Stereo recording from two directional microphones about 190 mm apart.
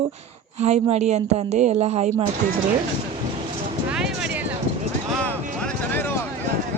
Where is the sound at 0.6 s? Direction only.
35° right (ahead or behind).